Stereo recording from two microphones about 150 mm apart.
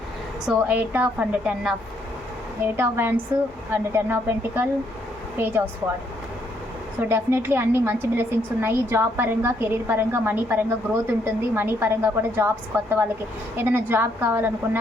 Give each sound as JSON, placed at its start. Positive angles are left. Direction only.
{"t": 0.4, "sound": "a woman's voice", "side_deg": -10}
{"t": 7.0, "sound": "a woman's voice", "side_deg": -15}